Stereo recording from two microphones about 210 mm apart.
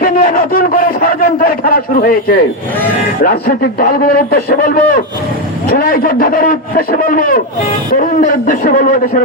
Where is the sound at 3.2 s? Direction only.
45° left (ahead or behind).